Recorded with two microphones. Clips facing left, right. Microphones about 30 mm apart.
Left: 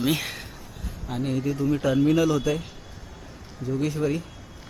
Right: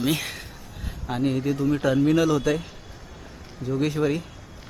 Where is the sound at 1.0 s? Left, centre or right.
Right.